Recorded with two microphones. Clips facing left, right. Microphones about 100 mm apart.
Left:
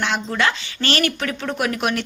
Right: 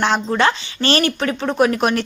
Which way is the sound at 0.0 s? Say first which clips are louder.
Right 5 dB; 35° right (ahead or behind).